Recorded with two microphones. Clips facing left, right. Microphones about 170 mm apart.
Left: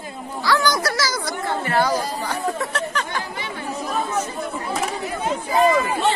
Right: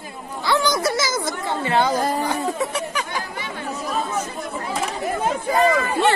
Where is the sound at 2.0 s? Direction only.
55° right (ahead or behind).